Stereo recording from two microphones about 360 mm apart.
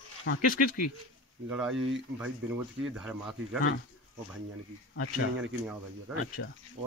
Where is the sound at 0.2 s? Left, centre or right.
Left.